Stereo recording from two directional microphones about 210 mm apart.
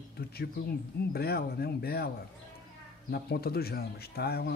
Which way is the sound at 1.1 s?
50° left (ahead or behind).